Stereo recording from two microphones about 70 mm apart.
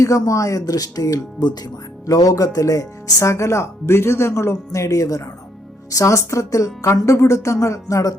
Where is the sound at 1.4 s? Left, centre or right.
Left.